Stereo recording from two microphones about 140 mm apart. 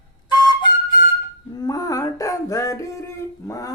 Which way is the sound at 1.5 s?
25° left (ahead or behind).